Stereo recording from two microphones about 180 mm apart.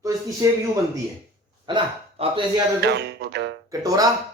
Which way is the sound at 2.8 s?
70° right (ahead or behind).